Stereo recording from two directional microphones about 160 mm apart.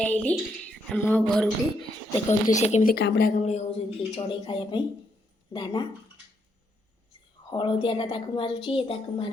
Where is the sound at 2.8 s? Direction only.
80° left.